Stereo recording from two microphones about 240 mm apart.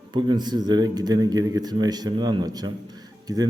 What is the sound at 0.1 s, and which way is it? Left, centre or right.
A man's voice, centre.